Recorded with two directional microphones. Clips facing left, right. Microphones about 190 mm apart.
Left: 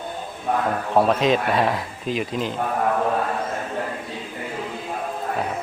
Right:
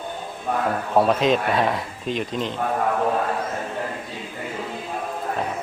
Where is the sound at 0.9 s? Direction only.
Centre (ahead or behind).